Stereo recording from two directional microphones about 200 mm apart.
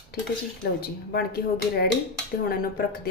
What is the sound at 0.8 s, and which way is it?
Speech, 50° left (ahead or behind).